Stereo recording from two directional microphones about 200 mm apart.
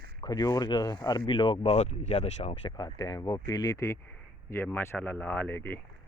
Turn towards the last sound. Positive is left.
turn(degrees=10)  # may be behind; listen again after turning